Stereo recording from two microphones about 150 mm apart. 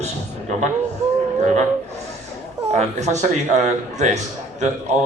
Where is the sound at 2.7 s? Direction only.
50° right (ahead or behind).